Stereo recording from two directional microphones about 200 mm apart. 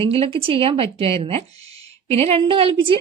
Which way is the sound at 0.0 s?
30° right (ahead or behind).